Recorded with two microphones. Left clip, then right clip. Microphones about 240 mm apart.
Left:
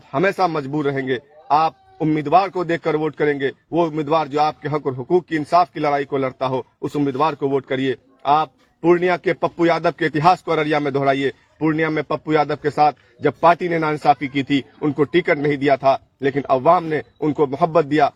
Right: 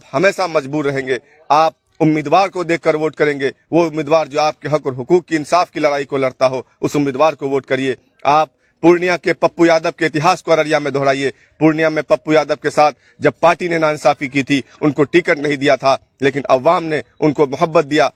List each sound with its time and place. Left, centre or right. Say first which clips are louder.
0.1 s a man's voice: right 4 dB; right